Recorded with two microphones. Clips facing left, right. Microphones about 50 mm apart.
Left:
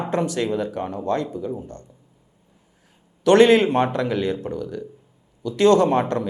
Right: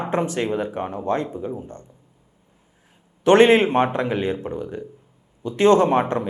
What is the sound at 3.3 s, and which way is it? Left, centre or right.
A man's voice, right.